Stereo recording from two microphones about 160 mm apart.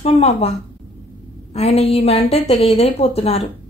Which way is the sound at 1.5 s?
40° left (ahead or behind).